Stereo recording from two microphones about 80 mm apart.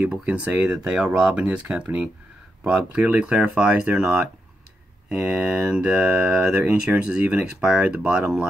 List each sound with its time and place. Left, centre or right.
0.0 s speech: centre